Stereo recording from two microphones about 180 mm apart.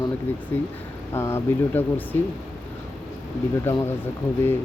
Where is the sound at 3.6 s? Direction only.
15° left (ahead or behind).